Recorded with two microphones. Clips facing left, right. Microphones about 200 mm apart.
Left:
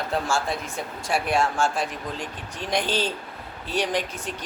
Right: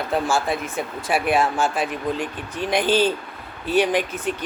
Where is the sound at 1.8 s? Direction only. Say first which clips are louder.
Right 6 dB; 55° right (ahead or behind).